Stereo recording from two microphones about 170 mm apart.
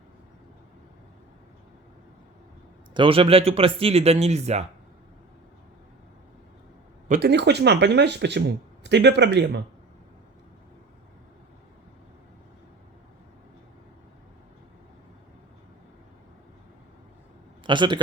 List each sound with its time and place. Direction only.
2.9 s a man's voice: 30° right (ahead or behind)
7.1 s speech: 75° right (ahead or behind); by 9.6 s 90° right
17.7 s a man's voice: 25° right (ahead or behind)